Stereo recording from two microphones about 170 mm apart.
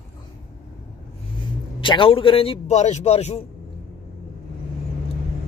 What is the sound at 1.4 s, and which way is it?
A man's voice, 30° left (ahead or behind).